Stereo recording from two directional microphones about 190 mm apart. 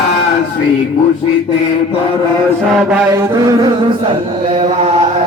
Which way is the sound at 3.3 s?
20° right (ahead or behind).